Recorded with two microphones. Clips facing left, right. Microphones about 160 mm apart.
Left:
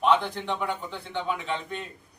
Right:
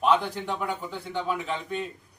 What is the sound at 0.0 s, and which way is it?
A man's voice, 5° right (ahead or behind).